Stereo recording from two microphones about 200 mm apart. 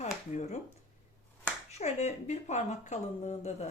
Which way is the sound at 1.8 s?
35° left (ahead or behind).